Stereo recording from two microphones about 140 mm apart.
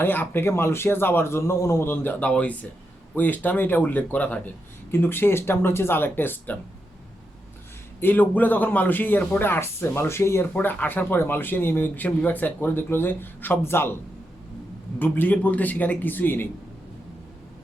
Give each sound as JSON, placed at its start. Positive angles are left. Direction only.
{"t": 0.0, "sound": "a man's voice", "side_deg": 15}
{"t": 8.0, "sound": "a man's voice", "side_deg": 10}
{"t": 14.9, "sound": "a man's voice", "side_deg": 15}